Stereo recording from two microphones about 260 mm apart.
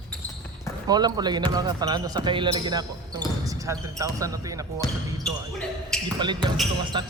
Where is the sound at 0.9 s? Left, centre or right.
Centre.